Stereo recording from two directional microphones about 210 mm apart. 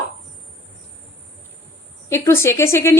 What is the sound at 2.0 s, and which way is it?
Speech, 15° left (ahead or behind).